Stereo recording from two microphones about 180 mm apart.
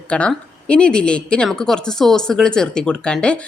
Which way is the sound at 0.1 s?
5° left (ahead or behind).